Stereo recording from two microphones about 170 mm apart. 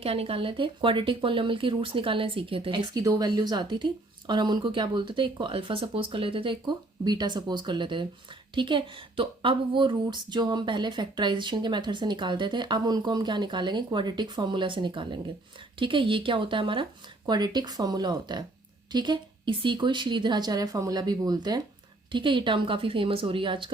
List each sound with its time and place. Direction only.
0.0 s speech: 35° right (ahead or behind)